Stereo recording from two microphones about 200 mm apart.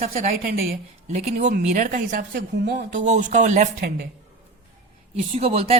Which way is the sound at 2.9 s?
40° right (ahead or behind).